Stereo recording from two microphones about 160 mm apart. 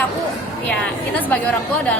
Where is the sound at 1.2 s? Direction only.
10° left (ahead or behind).